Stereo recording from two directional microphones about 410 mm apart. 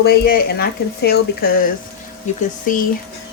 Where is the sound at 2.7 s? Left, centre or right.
Centre.